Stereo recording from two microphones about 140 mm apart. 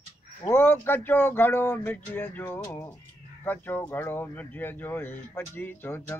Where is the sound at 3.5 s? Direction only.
15° left (ahead or behind).